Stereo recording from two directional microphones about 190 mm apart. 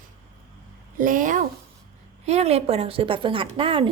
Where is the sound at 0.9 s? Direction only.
45° right (ahead or behind).